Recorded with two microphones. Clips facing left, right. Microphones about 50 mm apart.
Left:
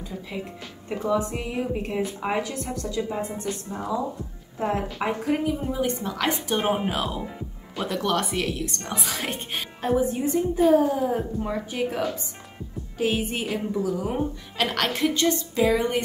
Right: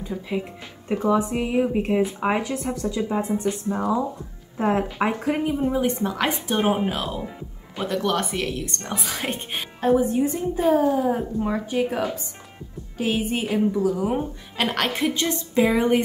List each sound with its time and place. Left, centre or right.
0.3 s a woman's voice: centre
4.6 s a woman's voice: right
5.8 s a woman's voice: centre